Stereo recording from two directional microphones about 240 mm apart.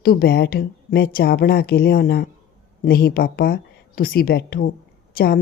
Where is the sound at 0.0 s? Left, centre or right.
Left.